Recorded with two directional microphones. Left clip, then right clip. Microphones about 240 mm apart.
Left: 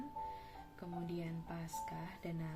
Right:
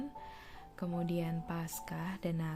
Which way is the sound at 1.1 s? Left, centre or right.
Right.